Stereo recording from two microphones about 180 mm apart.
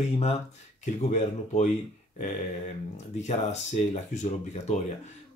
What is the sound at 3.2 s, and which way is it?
Speech, 40° left (ahead or behind).